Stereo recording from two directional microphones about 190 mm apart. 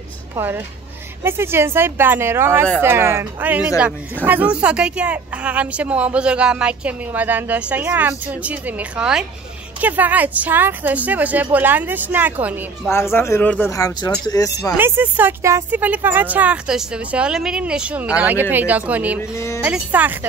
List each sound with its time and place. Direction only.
1.2 s speech: 10° right (ahead or behind)
12.8 s speech: 15° left (ahead or behind)
14.8 s speech: 10° right (ahead or behind)
19.3 s speech: 15° left (ahead or behind)
19.6 s speech: 5° right (ahead or behind)